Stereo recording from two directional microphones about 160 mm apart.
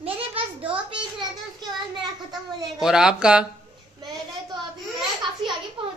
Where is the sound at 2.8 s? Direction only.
5° right (ahead or behind).